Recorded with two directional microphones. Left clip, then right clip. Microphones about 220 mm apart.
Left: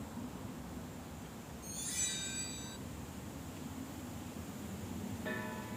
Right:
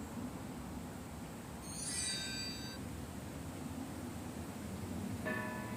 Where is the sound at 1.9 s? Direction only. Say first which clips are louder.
Left 1 dB; 40° left (ahead or behind).